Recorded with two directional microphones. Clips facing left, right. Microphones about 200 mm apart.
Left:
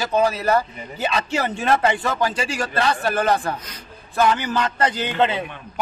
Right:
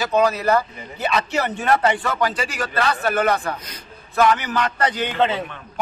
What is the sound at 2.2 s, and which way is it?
A man's voice, 30° left (ahead or behind).